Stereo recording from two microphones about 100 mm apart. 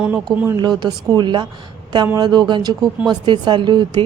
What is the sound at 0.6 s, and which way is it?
Speech, 50° right (ahead or behind).